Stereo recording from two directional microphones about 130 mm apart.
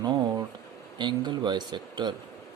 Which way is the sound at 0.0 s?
30° right (ahead or behind).